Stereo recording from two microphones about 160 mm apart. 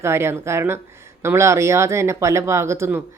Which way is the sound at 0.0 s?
15° right (ahead or behind).